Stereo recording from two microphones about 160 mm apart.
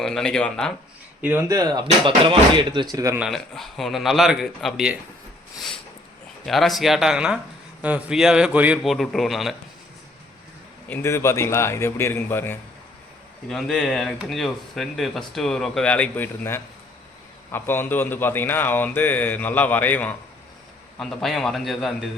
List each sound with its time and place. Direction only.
0.0 s speech: 5° left (ahead or behind)
1.2 s speech: 15° right (ahead or behind)
3.2 s speech: centre (ahead or behind)
6.4 s speech: centre (ahead or behind)
10.8 s speech: 15° left (ahead or behind)
13.5 s speech: centre (ahead or behind)